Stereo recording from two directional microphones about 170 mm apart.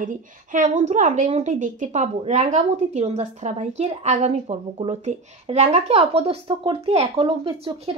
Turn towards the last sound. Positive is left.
turn(degrees=-35)  # may be behind; listen again after turning